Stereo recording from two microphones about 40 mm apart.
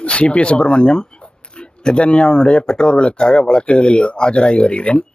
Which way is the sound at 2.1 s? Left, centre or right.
Left.